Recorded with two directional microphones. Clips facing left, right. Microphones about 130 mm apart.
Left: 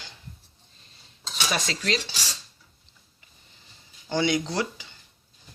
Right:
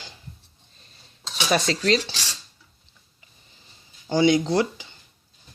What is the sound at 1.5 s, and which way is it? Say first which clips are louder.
Speech: right 8 dB; 35° right (ahead or behind).